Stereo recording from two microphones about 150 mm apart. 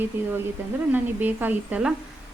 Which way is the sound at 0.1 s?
15° right (ahead or behind).